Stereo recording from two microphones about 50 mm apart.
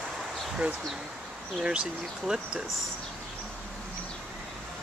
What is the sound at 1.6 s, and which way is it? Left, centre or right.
Speech, centre.